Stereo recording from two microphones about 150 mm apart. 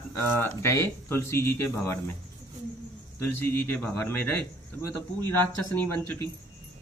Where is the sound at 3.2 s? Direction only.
15° left (ahead or behind).